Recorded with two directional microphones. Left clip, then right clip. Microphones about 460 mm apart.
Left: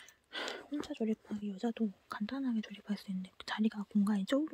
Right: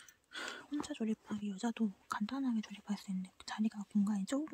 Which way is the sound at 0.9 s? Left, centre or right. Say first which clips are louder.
Left 6 dB; centre.